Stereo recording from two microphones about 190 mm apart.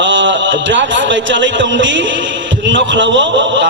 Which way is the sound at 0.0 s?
75° right (ahead or behind).